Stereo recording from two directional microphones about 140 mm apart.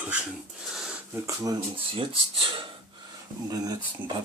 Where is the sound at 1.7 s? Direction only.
40° right (ahead or behind).